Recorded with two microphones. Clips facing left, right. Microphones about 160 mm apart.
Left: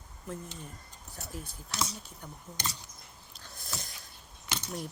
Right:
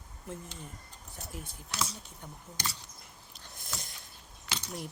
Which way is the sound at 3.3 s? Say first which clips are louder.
Left 2 dB; 20° right (ahead or behind).